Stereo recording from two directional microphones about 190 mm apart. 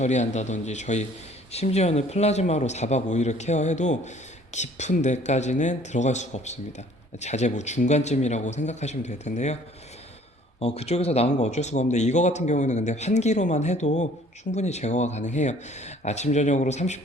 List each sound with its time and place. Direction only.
0.0 s speech: 35° left (ahead or behind)
10.6 s speech: 35° left (ahead or behind)